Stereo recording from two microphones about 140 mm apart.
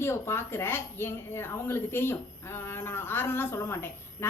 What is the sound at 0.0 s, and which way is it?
Speech, 20° left (ahead or behind).